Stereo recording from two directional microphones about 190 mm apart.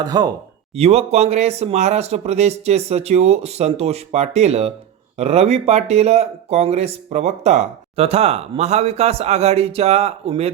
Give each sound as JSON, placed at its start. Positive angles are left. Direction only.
{"t": 0.0, "sound": "speech", "side_deg": -20}
{"t": 0.8, "sound": "speech", "side_deg": -30}